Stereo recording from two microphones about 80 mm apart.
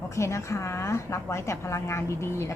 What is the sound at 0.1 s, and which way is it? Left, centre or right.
A woman's voice, left.